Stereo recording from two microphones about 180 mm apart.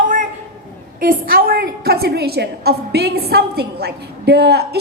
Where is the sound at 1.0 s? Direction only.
55° right (ahead or behind).